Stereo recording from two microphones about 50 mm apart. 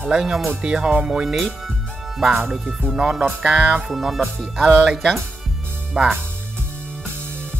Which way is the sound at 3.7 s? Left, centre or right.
Centre.